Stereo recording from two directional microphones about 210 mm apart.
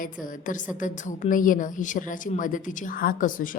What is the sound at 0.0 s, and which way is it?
A woman's voice, 40° left (ahead or behind).